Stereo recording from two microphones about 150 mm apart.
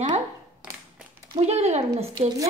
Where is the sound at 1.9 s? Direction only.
35° right (ahead or behind).